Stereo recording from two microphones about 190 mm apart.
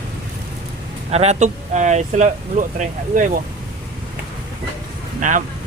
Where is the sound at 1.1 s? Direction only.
35° right (ahead or behind).